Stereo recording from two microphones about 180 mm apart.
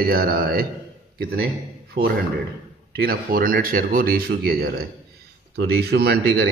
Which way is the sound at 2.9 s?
55° right (ahead or behind).